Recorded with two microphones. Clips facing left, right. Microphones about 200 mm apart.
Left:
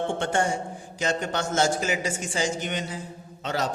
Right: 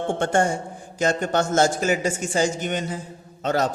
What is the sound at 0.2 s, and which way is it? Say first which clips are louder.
A man's voice: right 4 dB; 45° right (ahead or behind).